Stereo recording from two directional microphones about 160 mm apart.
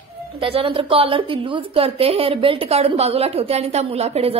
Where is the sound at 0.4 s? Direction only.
35° right (ahead or behind).